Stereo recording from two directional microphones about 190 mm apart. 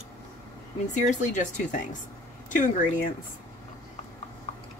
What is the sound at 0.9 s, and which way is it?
Speech, 40° left (ahead or behind).